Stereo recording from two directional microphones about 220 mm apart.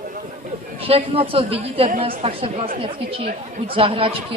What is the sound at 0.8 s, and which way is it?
A man's voice, 25° right (ahead or behind).